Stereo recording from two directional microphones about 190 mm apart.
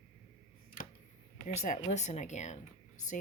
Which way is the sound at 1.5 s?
40° left (ahead or behind).